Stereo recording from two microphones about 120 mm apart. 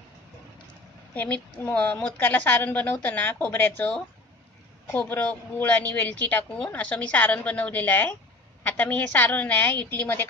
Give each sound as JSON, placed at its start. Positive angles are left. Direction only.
{"t": 1.1, "sound": "a woman's voice", "side_deg": 15}